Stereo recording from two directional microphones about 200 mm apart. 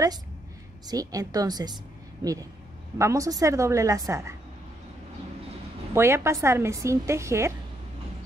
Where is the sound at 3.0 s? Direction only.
15° right (ahead or behind).